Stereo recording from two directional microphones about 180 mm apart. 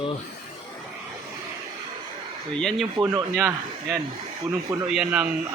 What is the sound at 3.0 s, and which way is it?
Speech, 20° right (ahead or behind).